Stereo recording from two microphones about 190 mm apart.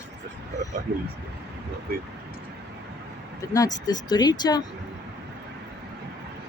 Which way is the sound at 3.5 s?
20° left (ahead or behind).